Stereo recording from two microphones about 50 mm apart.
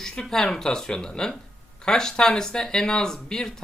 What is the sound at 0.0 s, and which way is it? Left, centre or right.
Speech, centre.